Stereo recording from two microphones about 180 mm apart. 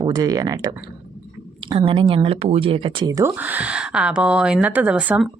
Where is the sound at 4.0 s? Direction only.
5° right (ahead or behind).